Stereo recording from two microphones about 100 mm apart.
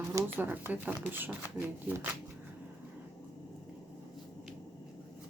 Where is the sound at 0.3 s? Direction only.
20° right (ahead or behind).